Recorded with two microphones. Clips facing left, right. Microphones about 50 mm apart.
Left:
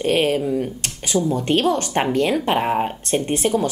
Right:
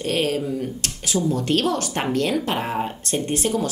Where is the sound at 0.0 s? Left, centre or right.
Left.